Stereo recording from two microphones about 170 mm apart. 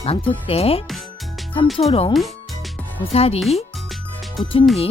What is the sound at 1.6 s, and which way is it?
Speech, centre (ahead or behind).